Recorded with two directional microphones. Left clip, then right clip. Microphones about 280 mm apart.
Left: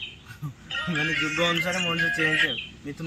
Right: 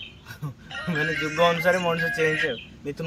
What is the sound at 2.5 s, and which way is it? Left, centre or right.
Speech, right.